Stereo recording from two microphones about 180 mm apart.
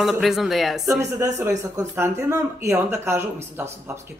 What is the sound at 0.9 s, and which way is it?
Speech, 15° right (ahead or behind).